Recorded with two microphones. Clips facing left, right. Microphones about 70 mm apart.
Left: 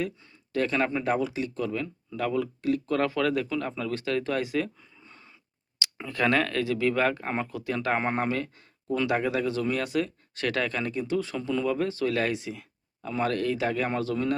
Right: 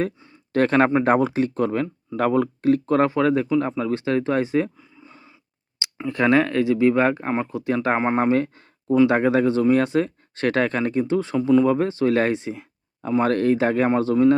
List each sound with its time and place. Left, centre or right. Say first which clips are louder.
0.5 s speech: right 9 dB; right
4.8 s a sound: right 6 dB; centre
6.1 s speech: right 7 dB; right
7.9 s speech: right 6 dB; centre
8.2 s speech: right 9 dB; right
11.3 s speech: right 12 dB; centre
11.6 s speech: right 7 dB; right